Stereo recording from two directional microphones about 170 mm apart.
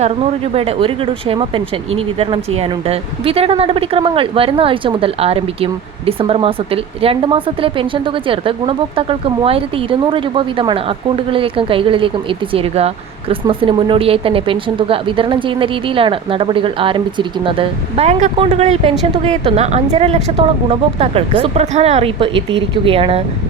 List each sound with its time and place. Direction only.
0.0 s speech: 35° right (ahead or behind)